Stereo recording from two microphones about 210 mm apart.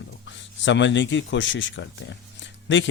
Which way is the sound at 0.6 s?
60° left (ahead or behind).